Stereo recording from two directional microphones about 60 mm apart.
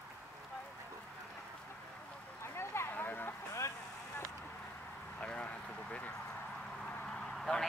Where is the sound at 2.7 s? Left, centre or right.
Left.